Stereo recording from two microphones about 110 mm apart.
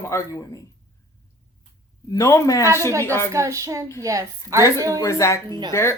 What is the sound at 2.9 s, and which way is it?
A woman's voice, 30° right (ahead or behind).